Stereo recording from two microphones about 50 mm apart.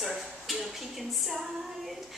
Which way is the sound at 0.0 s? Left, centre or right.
Centre.